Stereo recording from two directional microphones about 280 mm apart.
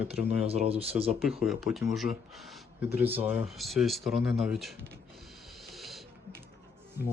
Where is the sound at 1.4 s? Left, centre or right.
Centre.